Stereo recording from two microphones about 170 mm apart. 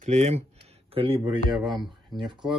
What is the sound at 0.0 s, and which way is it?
Speech, 40° right (ahead or behind).